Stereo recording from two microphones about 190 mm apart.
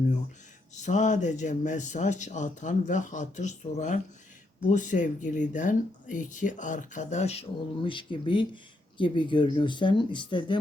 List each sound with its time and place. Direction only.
0.8 s speech: 40° left (ahead or behind)